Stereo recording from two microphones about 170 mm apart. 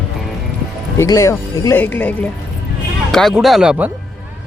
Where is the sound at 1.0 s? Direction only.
20° left (ahead or behind); by 3.9 s 5° right (ahead or behind).